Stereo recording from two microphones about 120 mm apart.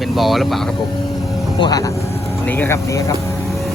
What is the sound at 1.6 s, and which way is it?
Speech, 30° left (ahead or behind).